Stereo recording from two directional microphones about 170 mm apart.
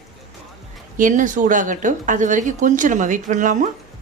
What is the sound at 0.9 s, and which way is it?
Speech, 50° right (ahead or behind).